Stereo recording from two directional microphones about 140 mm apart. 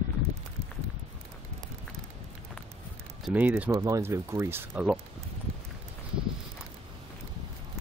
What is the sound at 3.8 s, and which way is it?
Speech, 20° right (ahead or behind).